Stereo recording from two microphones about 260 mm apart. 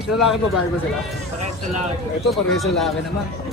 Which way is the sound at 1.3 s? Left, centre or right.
Right.